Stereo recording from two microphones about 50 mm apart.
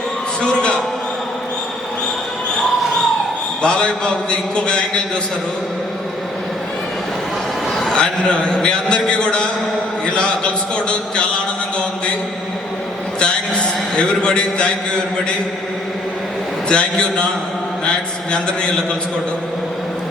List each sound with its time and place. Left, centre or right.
0.4 s a sound: centre
3.6 s a man's voice: centre
7.8 s a man's voice: centre
13.9 s a man's voice: centre
16.6 s a man's voice: centre
17.8 s mantra: centre